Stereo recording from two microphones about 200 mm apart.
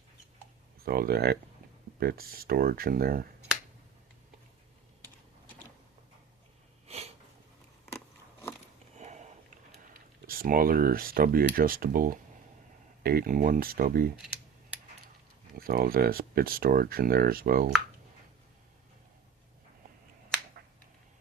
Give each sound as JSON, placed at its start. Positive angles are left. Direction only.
{"t": 0.8, "sound": "speech", "side_deg": -50}
{"t": 6.8, "sound": "a sound", "side_deg": -30}
{"t": 7.9, "sound": "keys jangling", "side_deg": 10}
{"t": 9.0, "sound": "sniff", "side_deg": -35}
{"t": 10.2, "sound": "speech", "side_deg": -45}
{"t": 15.5, "sound": "speech", "side_deg": -45}